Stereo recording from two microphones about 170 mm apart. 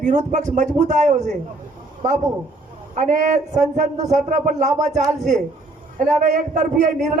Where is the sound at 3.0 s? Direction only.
45° right (ahead or behind).